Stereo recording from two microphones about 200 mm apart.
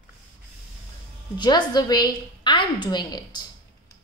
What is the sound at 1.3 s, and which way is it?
A woman's voice, 20° left (ahead or behind).